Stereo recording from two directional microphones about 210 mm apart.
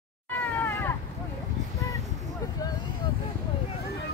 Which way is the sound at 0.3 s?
10° left (ahead or behind).